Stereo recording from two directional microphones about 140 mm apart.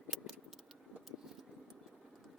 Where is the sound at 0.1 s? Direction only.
Centre (ahead or behind).